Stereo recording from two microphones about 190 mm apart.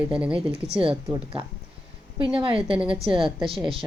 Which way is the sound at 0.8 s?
30° right (ahead or behind).